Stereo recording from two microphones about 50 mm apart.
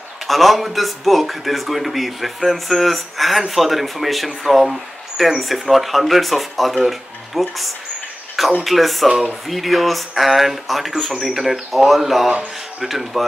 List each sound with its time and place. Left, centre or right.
0.3 s speech: centre
9.1 s speech: centre
9.5 s speech: centre